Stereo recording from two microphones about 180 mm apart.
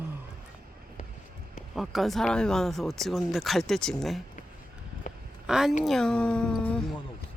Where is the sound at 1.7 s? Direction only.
Centre (ahead or behind).